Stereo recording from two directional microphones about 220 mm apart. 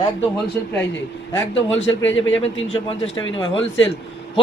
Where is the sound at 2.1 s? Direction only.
60° left (ahead or behind).